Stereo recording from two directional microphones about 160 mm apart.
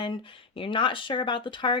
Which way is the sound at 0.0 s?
30° left (ahead or behind).